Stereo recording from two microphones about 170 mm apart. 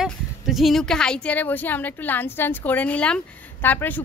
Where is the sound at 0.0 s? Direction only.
Centre (ahead or behind).